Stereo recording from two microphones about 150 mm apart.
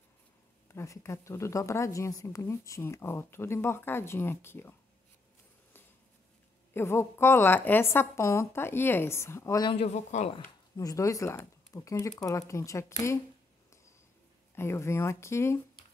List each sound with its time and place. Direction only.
0.7 s a woman's voice: 20° left (ahead or behind)
6.7 s a woman's voice: 15° left (ahead or behind)
9.7 s speech: 45° left (ahead or behind)
10.8 s speech: 20° left (ahead or behind)
14.5 s a woman's voice: 15° left (ahead or behind)